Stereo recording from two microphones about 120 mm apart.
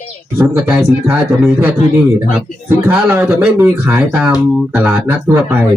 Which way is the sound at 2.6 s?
20° right (ahead or behind).